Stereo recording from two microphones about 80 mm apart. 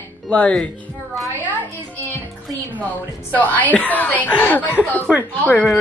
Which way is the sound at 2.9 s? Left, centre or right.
Left.